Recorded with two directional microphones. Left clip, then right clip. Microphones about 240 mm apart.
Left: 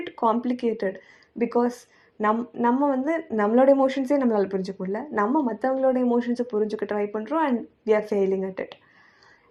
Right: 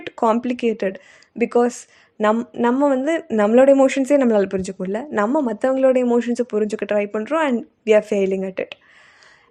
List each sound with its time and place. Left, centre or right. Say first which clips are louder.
0.0 s speech: right 5 dB; right